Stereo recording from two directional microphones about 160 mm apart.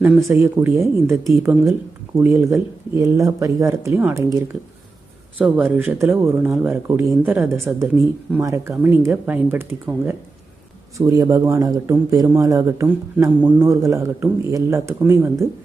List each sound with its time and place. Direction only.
0.0 s speech: 15° right (ahead or behind)
5.4 s speech: 10° right (ahead or behind)
6.8 s a man's voice: 20° right (ahead or behind)